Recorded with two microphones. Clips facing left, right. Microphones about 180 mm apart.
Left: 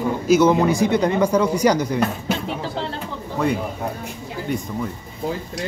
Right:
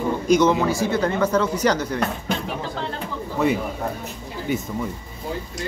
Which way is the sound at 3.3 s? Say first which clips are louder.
Even; centre (ahead or behind).